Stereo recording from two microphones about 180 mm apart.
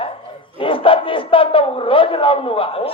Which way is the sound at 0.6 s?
30° left (ahead or behind).